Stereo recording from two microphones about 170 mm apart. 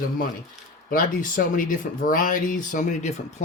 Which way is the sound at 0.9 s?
55° left (ahead or behind).